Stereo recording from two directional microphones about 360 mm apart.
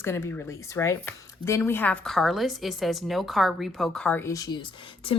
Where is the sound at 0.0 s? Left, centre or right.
Centre.